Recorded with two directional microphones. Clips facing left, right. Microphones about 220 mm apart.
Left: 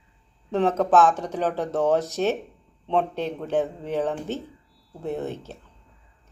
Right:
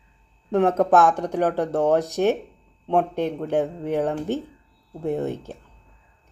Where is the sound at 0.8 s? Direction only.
15° right (ahead or behind).